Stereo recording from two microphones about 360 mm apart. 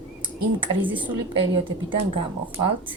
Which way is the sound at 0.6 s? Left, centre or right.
Centre.